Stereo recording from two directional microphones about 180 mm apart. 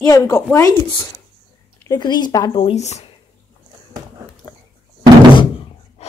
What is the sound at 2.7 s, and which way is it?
Speech, 40° left (ahead or behind).